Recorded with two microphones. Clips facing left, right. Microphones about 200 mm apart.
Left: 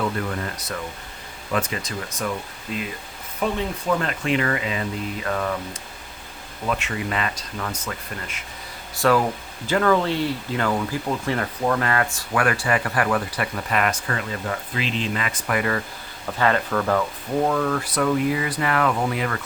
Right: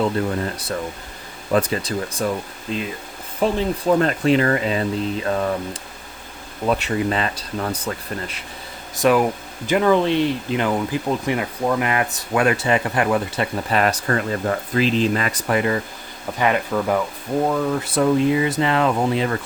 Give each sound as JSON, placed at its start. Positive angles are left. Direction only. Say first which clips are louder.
{"t": 0.0, "sound": "speech", "louder": "right 5 dB", "side_deg": -30}
{"t": 9.0, "sound": "speech", "louder": "right 3 dB", "side_deg": -15}
{"t": 15.5, "sound": "speech", "louder": "right 3 dB", "side_deg": -25}